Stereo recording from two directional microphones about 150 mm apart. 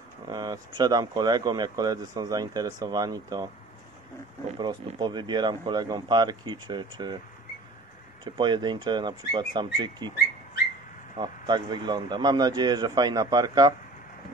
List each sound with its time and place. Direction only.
0.3 s speech: 25° right (ahead or behind)
4.6 s speech: 30° right (ahead or behind)
8.2 s speech: 30° right (ahead or behind)
11.1 s speech: 30° right (ahead or behind)